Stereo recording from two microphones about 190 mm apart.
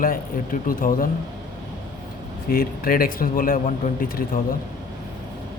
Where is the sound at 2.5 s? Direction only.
50° left (ahead or behind).